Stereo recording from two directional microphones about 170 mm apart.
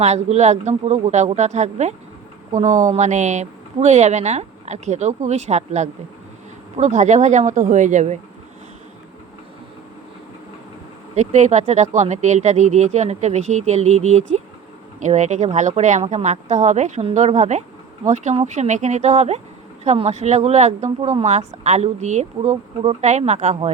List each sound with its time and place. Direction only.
0.0 s speech: 40° right (ahead or behind)
11.1 s speech: 40° right (ahead or behind)